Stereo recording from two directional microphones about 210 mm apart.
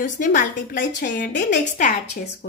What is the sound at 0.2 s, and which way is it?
A woman's voice, 40° left (ahead or behind).